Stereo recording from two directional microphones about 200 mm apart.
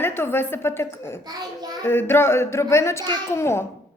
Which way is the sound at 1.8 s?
10° left (ahead or behind).